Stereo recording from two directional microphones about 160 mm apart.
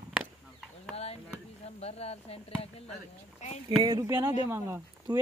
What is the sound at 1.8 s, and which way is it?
Speech, 40° left (ahead or behind).